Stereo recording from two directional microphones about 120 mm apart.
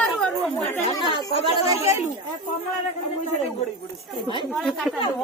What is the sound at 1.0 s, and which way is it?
Speech, 40° left (ahead or behind).